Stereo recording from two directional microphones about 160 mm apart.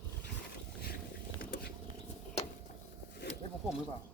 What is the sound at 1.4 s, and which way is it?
Patter, 60° left (ahead or behind).